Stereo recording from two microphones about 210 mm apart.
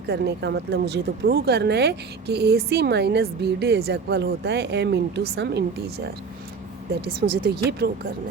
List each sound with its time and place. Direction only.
0.1 s speech: 55° right (ahead or behind)
7.2 s speech: 50° right (ahead or behind)